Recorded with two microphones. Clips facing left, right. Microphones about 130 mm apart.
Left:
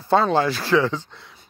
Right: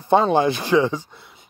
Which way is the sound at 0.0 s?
15° right (ahead or behind).